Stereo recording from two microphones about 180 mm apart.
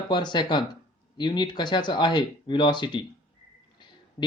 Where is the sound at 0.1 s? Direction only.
25° left (ahead or behind).